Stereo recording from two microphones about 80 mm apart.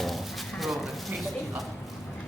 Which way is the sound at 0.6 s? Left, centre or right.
Centre.